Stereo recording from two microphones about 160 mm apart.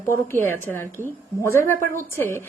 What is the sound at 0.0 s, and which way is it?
A woman's voice, 15° left (ahead or behind).